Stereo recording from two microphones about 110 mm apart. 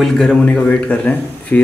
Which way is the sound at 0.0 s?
5° left (ahead or behind).